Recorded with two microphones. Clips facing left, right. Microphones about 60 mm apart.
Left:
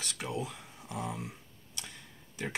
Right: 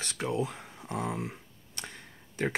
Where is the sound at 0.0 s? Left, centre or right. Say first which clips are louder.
Right 5 dB; right.